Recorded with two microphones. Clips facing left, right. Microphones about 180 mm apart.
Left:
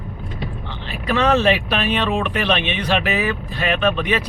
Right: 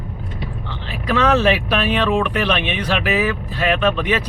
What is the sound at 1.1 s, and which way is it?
Speech, 15° left (ahead or behind).